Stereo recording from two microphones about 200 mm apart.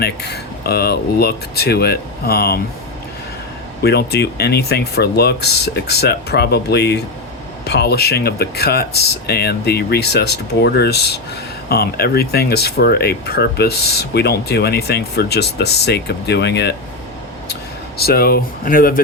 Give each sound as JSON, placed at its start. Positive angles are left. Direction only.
{"t": 0.0, "sound": "speech", "side_deg": 55}
{"t": 3.8, "sound": "speech", "side_deg": 55}